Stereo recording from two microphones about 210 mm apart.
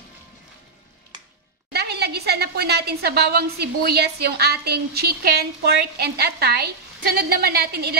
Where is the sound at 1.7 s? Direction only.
50° right (ahead or behind).